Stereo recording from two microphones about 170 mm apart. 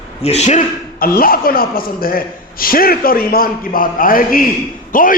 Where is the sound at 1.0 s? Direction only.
60° left (ahead or behind).